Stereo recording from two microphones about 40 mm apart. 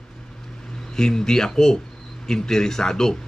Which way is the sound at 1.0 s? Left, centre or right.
Centre.